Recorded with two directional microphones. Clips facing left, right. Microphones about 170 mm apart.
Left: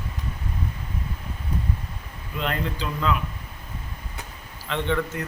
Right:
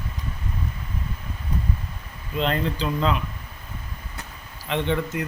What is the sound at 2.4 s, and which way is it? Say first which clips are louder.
Speech: right 4 dB; 30° right (ahead or behind).